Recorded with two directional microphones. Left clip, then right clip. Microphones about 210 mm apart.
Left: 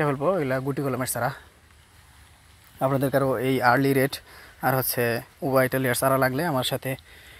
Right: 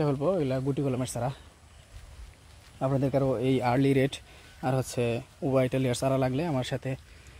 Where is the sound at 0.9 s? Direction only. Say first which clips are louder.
Left 5 dB; 5° left (ahead or behind).